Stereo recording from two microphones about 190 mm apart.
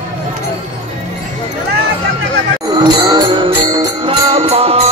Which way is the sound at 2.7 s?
20° right (ahead or behind).